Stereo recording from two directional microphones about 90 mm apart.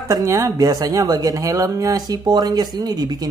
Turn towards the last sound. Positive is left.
turn(degrees=-50)  # may be behind; listen again after turning